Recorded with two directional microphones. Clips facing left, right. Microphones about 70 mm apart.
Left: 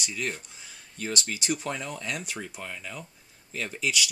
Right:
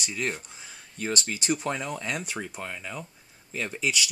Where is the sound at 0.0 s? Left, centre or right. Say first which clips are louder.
Right 2 dB; right.